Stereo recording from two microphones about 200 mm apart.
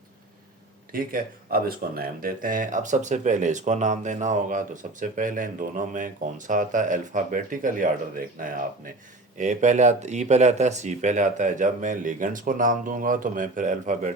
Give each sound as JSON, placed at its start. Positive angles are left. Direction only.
{"t": 0.9, "sound": "speech", "side_deg": -45}